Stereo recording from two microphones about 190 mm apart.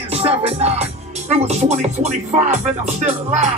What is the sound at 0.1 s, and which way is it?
Music, 35° right (ahead or behind).